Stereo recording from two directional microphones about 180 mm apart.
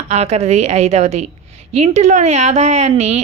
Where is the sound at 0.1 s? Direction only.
35° right (ahead or behind).